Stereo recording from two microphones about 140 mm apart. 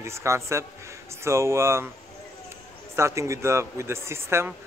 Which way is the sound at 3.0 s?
20° right (ahead or behind).